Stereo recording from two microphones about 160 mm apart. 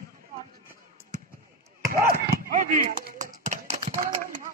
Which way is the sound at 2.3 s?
60° right (ahead or behind).